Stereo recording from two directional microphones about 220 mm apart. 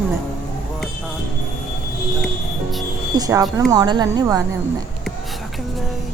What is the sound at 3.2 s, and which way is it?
A woman's voice, 15° right (ahead or behind).